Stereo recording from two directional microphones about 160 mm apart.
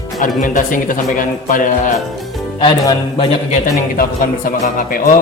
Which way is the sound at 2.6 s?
30° left (ahead or behind).